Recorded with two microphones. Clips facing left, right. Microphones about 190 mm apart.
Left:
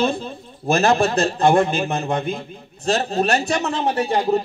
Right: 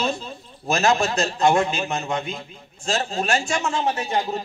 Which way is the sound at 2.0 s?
55° left (ahead or behind).